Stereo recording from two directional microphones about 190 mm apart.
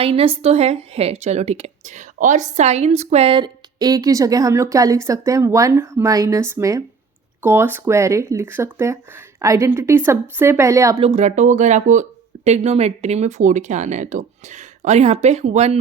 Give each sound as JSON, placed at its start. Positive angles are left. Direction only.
{"t": 0.0, "sound": "a woman's voice", "side_deg": -30}
{"t": 11.0, "sound": "speech", "side_deg": -35}